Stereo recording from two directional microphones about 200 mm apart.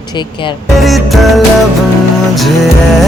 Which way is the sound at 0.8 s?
Centre (ahead or behind).